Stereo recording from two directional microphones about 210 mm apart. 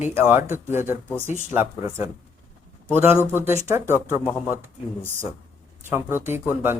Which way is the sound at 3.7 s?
10° right (ahead or behind).